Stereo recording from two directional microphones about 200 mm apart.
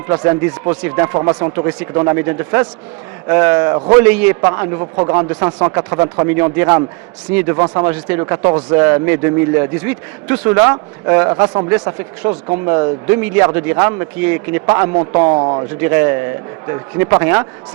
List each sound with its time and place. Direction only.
0.1 s a man's voice: 15° right (ahead or behind)
11.7 s a man's voice: 10° right (ahead or behind)
15.4 s speech: 25° right (ahead or behind)
15.8 s a man's voice: 10° right (ahead or behind)